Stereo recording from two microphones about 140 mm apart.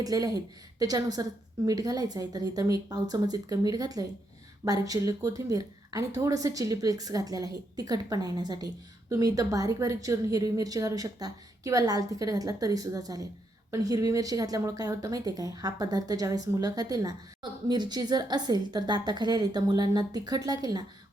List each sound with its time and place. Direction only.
0.0 s speech: 25° right (ahead or behind)